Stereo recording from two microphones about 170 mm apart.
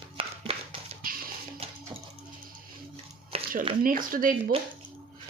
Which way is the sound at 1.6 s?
35° right (ahead or behind).